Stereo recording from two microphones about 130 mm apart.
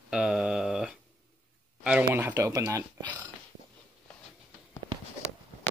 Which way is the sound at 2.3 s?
25° right (ahead or behind).